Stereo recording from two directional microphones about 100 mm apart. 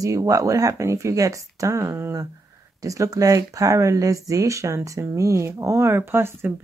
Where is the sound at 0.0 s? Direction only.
35° right (ahead or behind).